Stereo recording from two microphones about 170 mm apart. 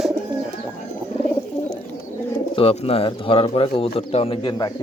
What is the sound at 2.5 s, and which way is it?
Speech, 35° left (ahead or behind).